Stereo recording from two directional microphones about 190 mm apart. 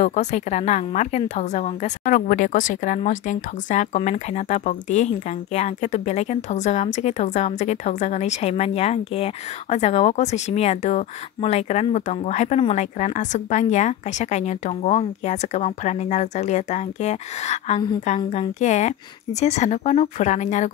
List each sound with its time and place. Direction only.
0.0 s a woman's voice: 35° left (ahead or behind)